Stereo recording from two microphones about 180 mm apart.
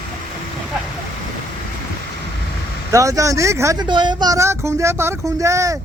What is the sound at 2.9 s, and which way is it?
Speech, 20° right (ahead or behind).